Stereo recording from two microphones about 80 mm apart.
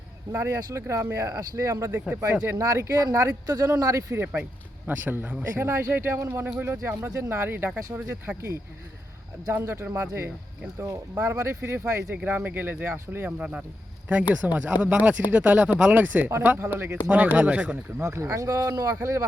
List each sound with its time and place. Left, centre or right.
0.3 s speech: right
4.9 s speech: right
5.5 s speech: right
9.5 s speech: right
12.1 s speech: centre
13.4 s speech: centre
18.0 s speech: right